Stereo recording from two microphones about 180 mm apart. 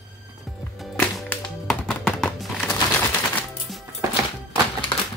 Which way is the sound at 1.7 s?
5° left (ahead or behind).